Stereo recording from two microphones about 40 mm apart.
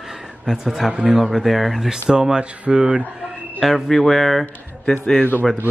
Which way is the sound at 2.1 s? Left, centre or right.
Centre.